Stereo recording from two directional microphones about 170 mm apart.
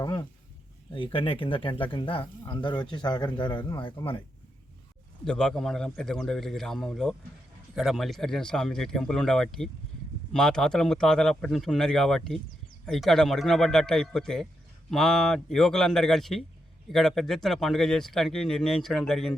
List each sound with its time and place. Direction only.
0.0 s speech: 25° left (ahead or behind)
5.2 s speech: 5° left (ahead or behind)